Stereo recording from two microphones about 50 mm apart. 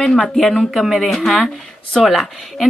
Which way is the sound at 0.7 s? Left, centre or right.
Centre.